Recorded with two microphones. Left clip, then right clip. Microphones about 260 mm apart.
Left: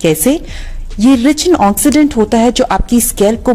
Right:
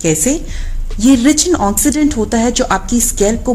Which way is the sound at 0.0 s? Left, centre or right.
Left.